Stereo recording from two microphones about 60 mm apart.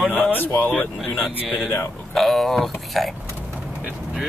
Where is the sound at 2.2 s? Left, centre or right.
Centre.